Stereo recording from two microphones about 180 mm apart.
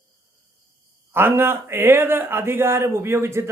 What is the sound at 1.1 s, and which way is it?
Speech, 15° right (ahead or behind).